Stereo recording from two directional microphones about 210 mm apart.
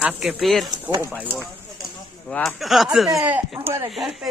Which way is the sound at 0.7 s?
20° right (ahead or behind).